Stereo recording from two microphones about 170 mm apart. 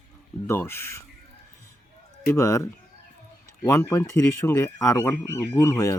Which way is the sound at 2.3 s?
15° left (ahead or behind).